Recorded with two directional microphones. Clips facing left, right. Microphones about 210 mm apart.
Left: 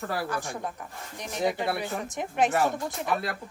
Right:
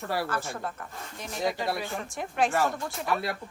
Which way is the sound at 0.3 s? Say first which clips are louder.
Even; 15° left (ahead or behind).